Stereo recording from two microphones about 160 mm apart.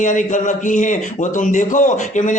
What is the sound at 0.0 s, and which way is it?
A man's voice, 50° left (ahead or behind).